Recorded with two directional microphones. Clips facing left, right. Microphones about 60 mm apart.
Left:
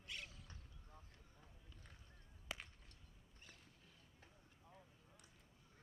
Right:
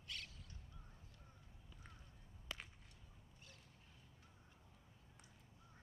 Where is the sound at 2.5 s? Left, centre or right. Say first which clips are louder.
Left 1 dB; centre.